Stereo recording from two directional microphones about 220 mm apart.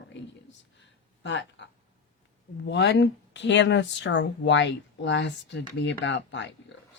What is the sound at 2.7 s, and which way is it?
A woman's voice, 50° left (ahead or behind).